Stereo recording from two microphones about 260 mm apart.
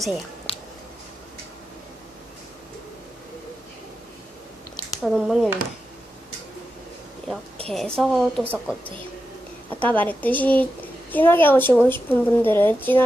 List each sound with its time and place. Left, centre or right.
5.0 s a woman's voice: centre
7.7 s a woman's voice: centre
9.6 s a woman's voice: centre